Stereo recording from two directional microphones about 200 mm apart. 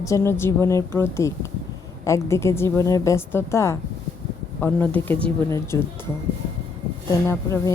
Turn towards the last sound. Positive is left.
turn(degrees=15)  # may be behind; listen again after turning